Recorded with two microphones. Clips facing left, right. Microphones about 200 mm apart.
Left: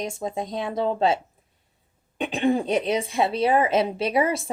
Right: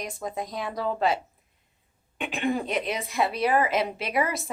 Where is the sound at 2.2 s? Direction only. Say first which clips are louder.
Left 5 dB; 30° left (ahead or behind).